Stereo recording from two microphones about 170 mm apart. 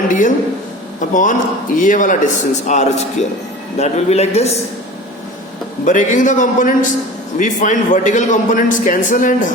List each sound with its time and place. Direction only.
0.1 s a man's voice: 50° left (ahead or behind)
5.8 s a man's voice: 50° left (ahead or behind)